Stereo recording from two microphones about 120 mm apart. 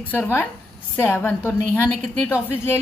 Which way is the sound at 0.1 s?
15° left (ahead or behind).